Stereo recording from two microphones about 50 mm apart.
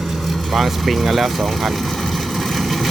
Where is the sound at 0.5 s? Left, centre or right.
Centre.